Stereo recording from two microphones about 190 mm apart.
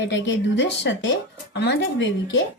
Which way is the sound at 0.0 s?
70° left (ahead or behind).